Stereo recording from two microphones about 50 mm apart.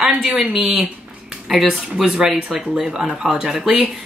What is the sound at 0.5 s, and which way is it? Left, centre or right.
Speech, centre.